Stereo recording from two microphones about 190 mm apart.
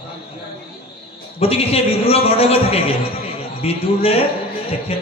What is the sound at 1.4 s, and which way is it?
A man's voice, 30° left (ahead or behind).